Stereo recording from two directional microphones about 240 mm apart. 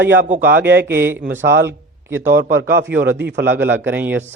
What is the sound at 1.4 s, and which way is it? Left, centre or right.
Speech, right.